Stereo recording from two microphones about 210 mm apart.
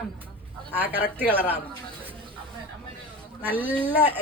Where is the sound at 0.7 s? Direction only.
10° right (ahead or behind).